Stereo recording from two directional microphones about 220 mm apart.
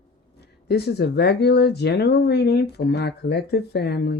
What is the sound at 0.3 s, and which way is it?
Speech, 50° left (ahead or behind).